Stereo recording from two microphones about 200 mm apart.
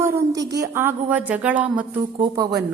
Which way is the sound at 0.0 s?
15° right (ahead or behind).